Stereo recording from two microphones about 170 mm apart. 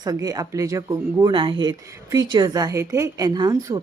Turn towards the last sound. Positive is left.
turn(degrees=-20)  # may be behind; listen again after turning